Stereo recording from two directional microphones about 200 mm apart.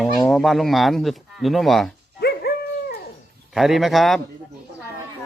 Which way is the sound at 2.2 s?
50° left (ahead or behind).